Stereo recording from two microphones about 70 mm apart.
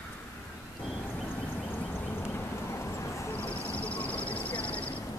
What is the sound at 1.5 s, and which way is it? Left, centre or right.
Vehicle, left.